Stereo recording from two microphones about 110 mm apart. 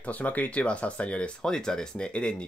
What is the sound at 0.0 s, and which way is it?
Speech, 15° left (ahead or behind).